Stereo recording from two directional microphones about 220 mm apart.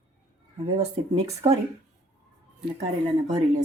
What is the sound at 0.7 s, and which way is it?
Speech, 30° right (ahead or behind).